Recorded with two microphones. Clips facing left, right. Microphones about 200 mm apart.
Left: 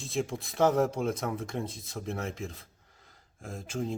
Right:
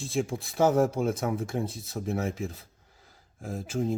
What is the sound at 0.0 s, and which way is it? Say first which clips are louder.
Speech: right 3 dB; centre (ahead or behind).